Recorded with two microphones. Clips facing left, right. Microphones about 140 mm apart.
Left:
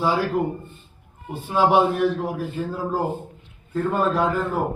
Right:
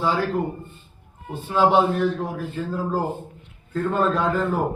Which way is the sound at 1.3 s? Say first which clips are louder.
Even; 10° left (ahead or behind).